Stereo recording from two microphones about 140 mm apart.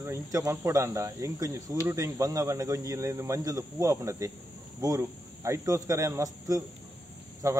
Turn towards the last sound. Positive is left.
turn(degrees=-20)  # may be behind; listen again after turning